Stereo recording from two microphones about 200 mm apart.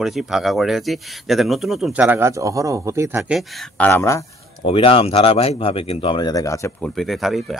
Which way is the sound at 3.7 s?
10° left (ahead or behind).